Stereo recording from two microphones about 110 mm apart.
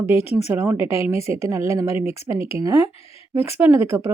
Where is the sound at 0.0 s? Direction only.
65° left (ahead or behind).